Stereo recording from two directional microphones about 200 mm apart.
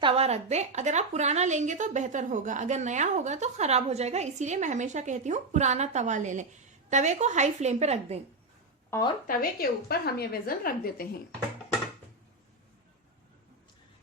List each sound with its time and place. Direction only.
0.0 s a woman's voice: 30° right (ahead or behind)
9.2 s a woman's voice: 45° left (ahead or behind)